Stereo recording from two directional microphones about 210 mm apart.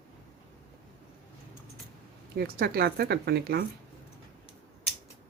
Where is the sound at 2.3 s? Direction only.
45° right (ahead or behind).